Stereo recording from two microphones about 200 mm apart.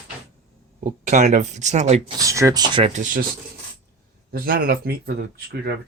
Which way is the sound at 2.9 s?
40° right (ahead or behind).